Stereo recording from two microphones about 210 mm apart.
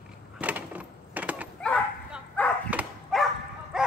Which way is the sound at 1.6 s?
5° left (ahead or behind).